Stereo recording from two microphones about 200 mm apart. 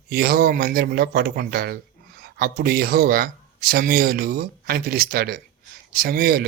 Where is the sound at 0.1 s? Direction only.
50° right (ahead or behind).